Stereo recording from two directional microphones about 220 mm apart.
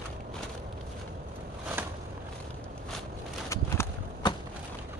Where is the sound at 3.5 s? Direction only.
15° left (ahead or behind).